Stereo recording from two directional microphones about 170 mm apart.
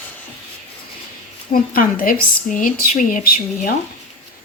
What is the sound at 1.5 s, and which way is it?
Speech, 55° left (ahead or behind).